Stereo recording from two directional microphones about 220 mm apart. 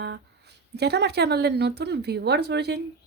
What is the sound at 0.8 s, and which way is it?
A woman's voice, 50° right (ahead or behind).